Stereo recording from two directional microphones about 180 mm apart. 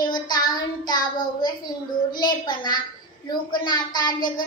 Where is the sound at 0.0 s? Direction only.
25° left (ahead or behind).